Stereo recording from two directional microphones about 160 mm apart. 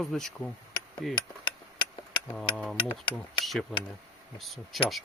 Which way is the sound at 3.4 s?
Centre (ahead or behind).